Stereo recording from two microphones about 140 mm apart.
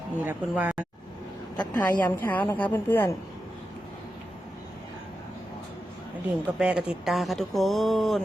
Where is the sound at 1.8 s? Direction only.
10° left (ahead or behind).